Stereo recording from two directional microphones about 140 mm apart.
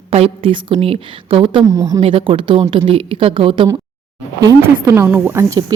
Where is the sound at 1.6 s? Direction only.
20° right (ahead or behind).